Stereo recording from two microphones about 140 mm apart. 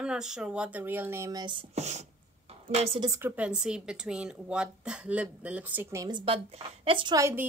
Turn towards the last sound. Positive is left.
turn(degrees=-20)  # may be behind; listen again after turning